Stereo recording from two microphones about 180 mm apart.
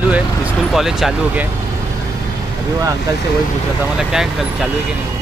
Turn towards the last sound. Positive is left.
turn(degrees=-5)  # may be behind; listen again after turning